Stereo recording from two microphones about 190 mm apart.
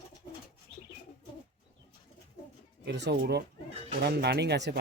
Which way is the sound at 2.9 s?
65° right (ahead or behind).